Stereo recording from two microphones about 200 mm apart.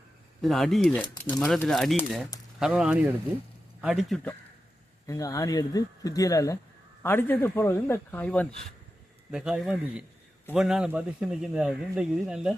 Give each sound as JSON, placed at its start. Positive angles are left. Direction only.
{"t": 0.4, "sound": "speech", "side_deg": 0}
{"t": 5.0, "sound": "speech", "side_deg": 15}